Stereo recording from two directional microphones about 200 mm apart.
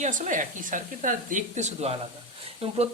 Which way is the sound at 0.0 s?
40° right (ahead or behind).